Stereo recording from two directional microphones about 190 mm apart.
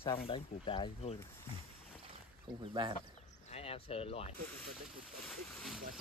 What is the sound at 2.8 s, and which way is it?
Speech, 25° right (ahead or behind).